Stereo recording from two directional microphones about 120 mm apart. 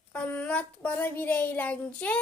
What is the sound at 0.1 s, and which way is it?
A woman's voice, 10° left (ahead or behind).